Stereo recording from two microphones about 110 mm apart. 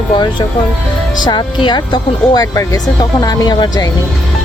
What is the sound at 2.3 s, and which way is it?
Speech, 35° left (ahead or behind).